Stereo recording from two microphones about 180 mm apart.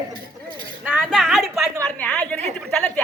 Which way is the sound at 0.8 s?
Centre (ahead or behind).